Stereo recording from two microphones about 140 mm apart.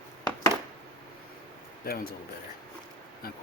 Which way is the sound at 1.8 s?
90° left.